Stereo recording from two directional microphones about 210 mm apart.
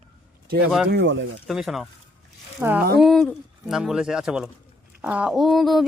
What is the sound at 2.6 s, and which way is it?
Speech, 10° right (ahead or behind).